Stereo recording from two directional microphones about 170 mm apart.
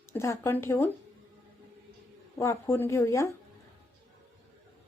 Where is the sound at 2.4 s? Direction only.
15° left (ahead or behind).